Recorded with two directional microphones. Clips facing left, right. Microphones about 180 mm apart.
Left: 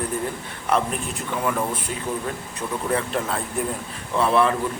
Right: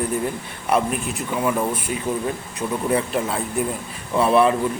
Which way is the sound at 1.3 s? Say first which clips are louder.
Right 3 dB; 10° right (ahead or behind).